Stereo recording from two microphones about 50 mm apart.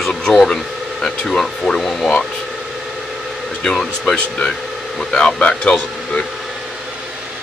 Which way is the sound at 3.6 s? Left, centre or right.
Centre.